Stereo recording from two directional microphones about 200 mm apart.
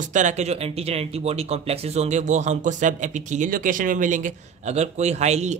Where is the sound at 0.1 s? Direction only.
35° right (ahead or behind).